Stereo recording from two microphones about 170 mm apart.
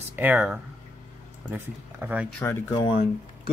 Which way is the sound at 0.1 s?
10° right (ahead or behind).